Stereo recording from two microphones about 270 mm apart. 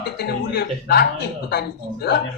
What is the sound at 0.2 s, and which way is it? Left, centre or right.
Speech, left.